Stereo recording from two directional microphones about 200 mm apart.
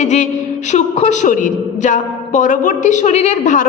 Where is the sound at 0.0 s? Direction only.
35° left (ahead or behind).